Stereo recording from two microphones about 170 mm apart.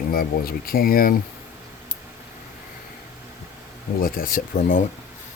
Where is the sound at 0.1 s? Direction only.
60° left (ahead or behind).